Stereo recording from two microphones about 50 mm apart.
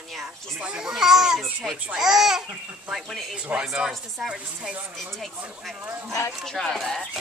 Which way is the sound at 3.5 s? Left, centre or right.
Right.